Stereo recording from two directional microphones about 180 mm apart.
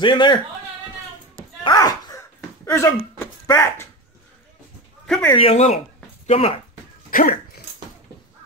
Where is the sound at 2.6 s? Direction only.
15° left (ahead or behind).